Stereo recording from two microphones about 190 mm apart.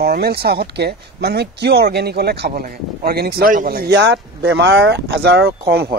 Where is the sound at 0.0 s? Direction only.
55° right (ahead or behind).